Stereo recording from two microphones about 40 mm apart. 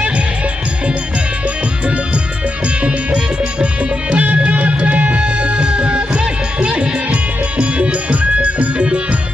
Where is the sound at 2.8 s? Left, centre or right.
Right.